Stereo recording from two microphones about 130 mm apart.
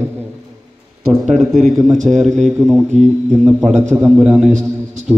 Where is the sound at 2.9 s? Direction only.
60° right (ahead or behind).